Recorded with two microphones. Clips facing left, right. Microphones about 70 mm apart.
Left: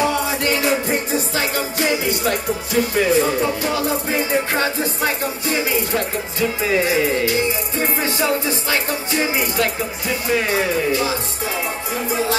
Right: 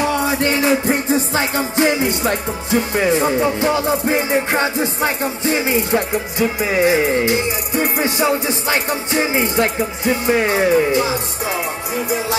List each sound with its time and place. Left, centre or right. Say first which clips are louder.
0.4 s music: right 3 dB; right